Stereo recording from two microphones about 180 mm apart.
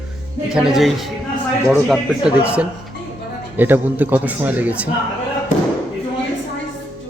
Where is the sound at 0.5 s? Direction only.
Centre (ahead or behind).